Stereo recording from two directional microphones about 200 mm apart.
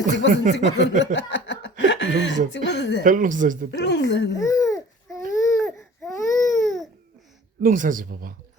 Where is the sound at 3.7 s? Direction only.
60° left (ahead or behind).